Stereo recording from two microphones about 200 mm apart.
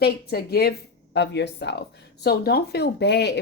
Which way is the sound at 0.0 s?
55° left (ahead or behind).